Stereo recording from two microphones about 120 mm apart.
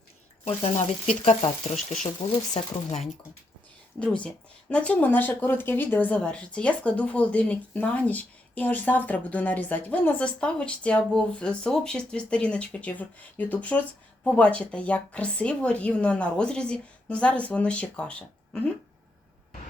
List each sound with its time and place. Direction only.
0.4 s speech: 60° left (ahead or behind); by 3.0 s 80° left
4.0 s speech: 10° left (ahead or behind)